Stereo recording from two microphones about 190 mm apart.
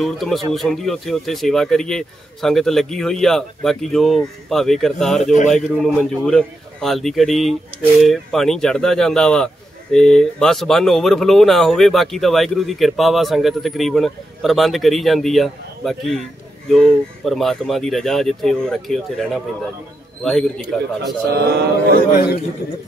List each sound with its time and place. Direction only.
0.0 s speech: centre (ahead or behind)
21.3 s speech: 60° right (ahead or behind)